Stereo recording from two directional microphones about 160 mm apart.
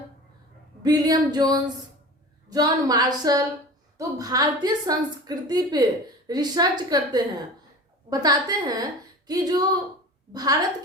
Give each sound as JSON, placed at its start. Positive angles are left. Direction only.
{"t": 0.8, "sound": "a woman's voice", "side_deg": -25}